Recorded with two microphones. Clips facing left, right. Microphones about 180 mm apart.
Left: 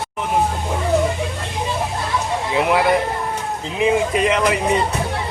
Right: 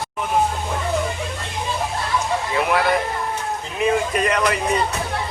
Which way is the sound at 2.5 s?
15° left (ahead or behind).